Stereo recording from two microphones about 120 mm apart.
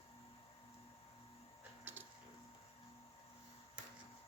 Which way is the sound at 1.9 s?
15° right (ahead or behind).